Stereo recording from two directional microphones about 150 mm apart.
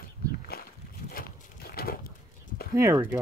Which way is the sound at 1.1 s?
90° left.